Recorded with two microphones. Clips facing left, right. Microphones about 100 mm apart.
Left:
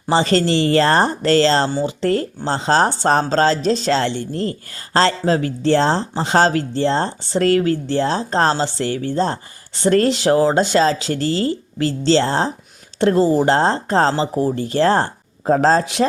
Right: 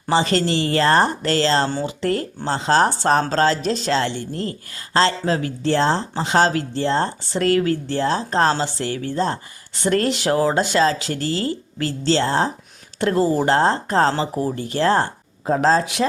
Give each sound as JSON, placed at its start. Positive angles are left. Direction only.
{"t": 0.1, "sound": "speech", "side_deg": 35}